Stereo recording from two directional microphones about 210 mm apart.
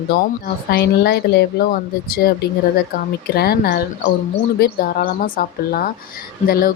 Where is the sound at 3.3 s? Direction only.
50° left (ahead or behind).